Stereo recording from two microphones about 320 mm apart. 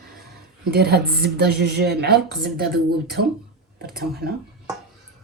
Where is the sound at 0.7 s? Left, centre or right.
Right.